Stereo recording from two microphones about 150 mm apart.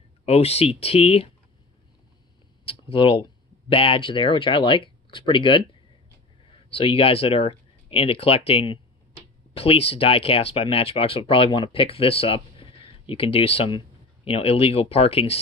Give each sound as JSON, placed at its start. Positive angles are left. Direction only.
{"t": 0.2, "sound": "speech", "side_deg": 45}
{"t": 2.6, "sound": "speech", "side_deg": 40}
{"t": 6.7, "sound": "speech", "side_deg": 40}